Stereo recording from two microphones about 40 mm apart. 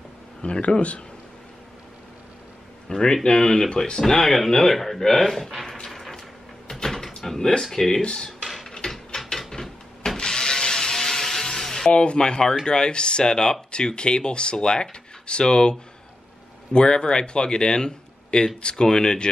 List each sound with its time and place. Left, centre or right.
0.4 s speech: left
2.9 s speech: centre
5.9 s a sound: centre
7.2 s speech: centre
8.0 s speech: left
8.6 s gears: centre
9.5 s ratchet: centre
11.9 s speech: left
16.7 s speech: left